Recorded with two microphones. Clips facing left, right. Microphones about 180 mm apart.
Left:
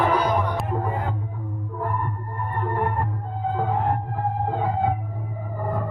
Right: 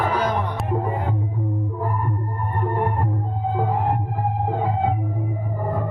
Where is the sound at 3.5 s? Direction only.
10° right (ahead or behind).